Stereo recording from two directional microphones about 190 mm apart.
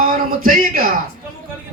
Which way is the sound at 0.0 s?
45° right (ahead or behind).